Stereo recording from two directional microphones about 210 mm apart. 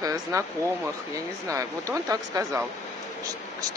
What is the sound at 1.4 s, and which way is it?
Speech, 15° right (ahead or behind).